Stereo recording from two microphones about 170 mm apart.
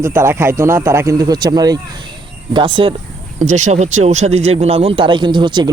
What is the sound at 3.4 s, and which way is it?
Speech, 45° right (ahead or behind).